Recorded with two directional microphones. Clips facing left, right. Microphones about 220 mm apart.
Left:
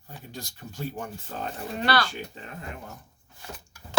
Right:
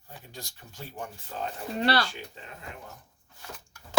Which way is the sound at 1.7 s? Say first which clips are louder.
Even; 30° right (ahead or behind).